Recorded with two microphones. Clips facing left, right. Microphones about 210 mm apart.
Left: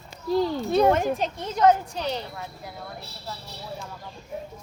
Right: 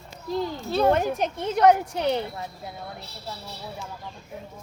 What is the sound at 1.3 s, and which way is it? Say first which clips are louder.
Speech: right 2 dB; 60° right (ahead or behind).